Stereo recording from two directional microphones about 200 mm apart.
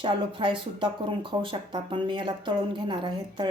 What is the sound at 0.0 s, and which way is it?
Speech, 25° right (ahead or behind).